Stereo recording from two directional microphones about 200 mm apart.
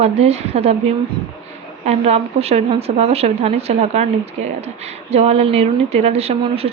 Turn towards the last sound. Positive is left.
turn(degrees=-30)  # may be behind; listen again after turning